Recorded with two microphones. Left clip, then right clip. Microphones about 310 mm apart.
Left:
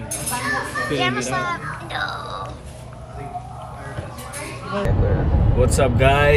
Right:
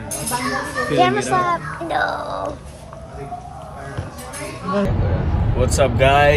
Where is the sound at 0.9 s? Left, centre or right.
Right.